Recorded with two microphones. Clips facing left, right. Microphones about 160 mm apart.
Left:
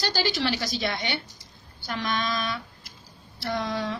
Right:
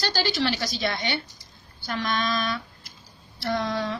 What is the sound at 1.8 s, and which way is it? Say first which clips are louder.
Speech: right 2 dB; 10° left (ahead or behind).